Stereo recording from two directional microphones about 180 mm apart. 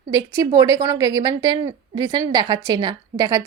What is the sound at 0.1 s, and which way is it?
A woman's voice, 20° right (ahead or behind).